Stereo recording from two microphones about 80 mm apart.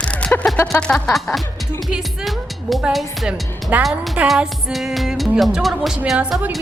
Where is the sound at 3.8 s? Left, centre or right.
Centre.